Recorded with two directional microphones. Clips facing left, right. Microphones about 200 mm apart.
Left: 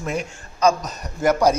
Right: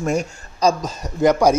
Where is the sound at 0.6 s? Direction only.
35° right (ahead or behind).